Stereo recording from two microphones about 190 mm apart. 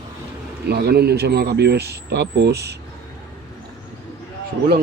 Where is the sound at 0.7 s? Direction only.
55° right (ahead or behind).